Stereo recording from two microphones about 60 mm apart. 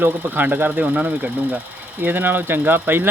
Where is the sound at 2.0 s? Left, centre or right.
Right.